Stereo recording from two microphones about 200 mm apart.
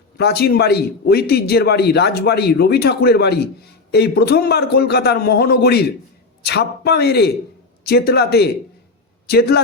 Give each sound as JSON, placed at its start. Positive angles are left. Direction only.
{"t": 0.2, "sound": "a man's voice", "side_deg": 55}